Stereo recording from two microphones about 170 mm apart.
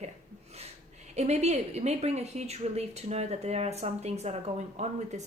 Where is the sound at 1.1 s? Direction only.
40° right (ahead or behind).